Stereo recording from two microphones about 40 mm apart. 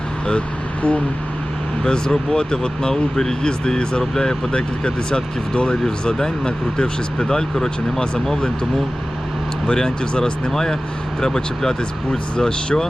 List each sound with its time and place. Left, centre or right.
0.3 s speech: left
1.8 s speech: centre
9.6 s speech: centre